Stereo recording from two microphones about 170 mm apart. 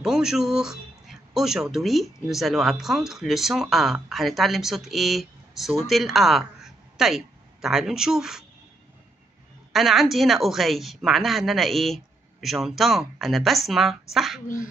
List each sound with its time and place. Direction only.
0.0 s speech: 5° right (ahead or behind)
9.7 s a woman's voice: centre (ahead or behind)